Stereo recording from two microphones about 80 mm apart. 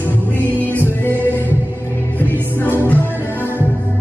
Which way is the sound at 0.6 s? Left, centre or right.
Left.